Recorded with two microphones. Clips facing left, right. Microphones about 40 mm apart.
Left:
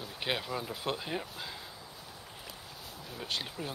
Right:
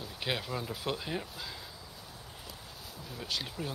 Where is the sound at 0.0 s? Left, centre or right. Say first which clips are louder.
Left 1 dB; centre.